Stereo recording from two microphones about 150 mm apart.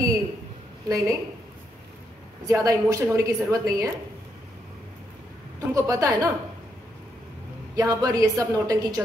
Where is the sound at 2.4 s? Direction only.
20° right (ahead or behind).